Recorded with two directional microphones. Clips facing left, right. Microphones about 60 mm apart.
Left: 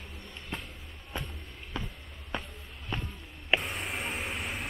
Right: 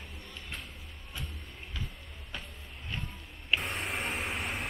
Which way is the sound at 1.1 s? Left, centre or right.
Left.